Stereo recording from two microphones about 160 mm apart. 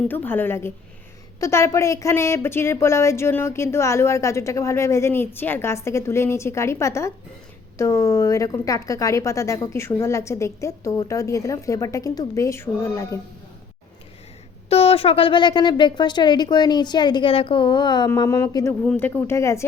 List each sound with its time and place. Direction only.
0.1 s a woman's voice: 10° left (ahead or behind)
14.7 s a woman's voice: 40° left (ahead or behind); by 19.6 s 15° left (ahead or behind)